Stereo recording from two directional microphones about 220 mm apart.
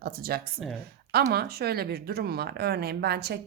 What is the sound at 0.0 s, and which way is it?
A woman's voice, 45° right (ahead or behind).